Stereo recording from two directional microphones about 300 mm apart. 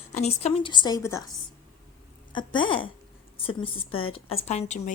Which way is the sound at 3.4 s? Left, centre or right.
Centre.